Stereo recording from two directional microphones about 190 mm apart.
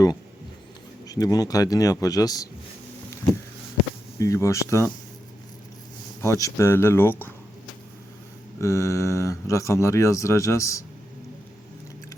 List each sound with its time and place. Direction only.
1.0 s speech: 20° left (ahead or behind)
4.2 s speech: 15° left (ahead or behind)
6.2 s speech: 15° left (ahead or behind)
8.6 s speech: 15° left (ahead or behind)